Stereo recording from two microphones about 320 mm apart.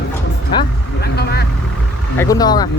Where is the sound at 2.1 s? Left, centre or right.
Centre.